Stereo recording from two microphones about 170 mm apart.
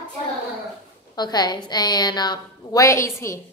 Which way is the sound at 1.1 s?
25° left (ahead or behind).